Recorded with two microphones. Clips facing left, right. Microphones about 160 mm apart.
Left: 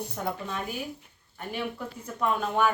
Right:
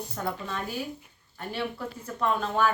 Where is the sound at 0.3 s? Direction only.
15° left (ahead or behind).